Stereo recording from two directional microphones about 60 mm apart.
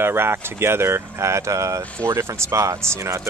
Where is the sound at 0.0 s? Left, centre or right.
Right.